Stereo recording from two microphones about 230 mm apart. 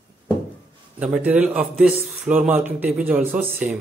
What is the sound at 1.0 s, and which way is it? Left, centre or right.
A man's voice, centre.